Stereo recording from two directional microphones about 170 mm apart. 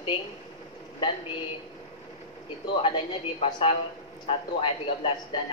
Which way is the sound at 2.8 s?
30° left (ahead or behind).